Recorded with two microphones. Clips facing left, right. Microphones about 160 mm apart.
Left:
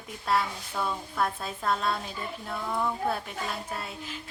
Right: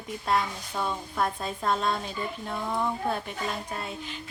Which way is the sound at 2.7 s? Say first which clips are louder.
Right 1 dB; 15° right (ahead or behind).